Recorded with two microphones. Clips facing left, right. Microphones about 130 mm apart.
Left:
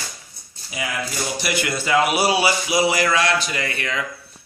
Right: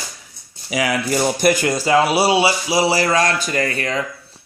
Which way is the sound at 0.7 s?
80° right.